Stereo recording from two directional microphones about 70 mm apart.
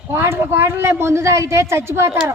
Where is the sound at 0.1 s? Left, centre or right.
Right.